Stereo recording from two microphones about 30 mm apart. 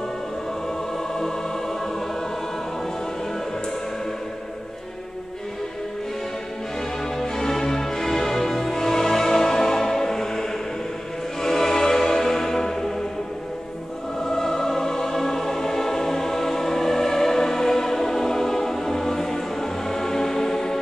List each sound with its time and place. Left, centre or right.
1.1 s music: centre
7.2 s music: centre
11.4 s music: centre
14.2 s music: centre